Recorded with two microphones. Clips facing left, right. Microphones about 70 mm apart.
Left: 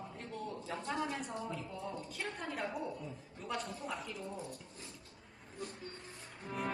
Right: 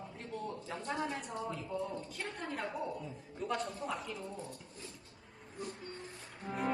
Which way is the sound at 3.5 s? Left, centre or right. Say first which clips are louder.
Right 2 dB; centre.